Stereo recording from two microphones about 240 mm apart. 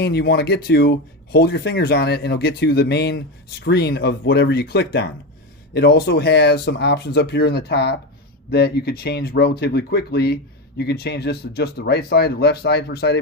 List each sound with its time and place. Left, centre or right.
0.0 s speech: left